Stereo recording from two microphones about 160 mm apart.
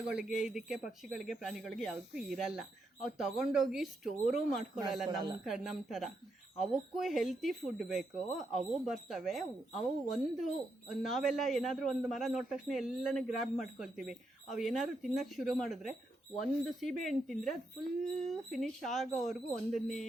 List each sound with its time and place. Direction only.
0.1 s speech: 5° right (ahead or behind)
5.0 s speech: 25° right (ahead or behind)
5.5 s speech: centre (ahead or behind)